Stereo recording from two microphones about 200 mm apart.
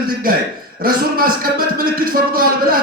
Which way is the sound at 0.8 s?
45° right (ahead or behind).